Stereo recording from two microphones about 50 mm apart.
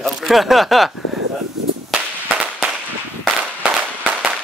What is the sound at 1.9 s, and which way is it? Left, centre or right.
Firecracker, right.